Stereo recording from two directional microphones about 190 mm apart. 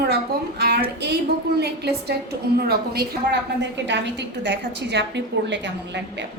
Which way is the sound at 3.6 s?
65° right (ahead or behind).